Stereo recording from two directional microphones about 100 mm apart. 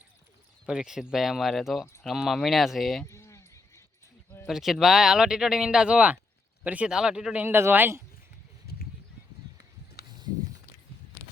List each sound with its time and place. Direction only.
0.7 s speech: 5° right (ahead or behind)
3.1 s a sound: 30° left (ahead or behind)
4.4 s speech: 5° right (ahead or behind)
7.4 s speech: 20° right (ahead or behind)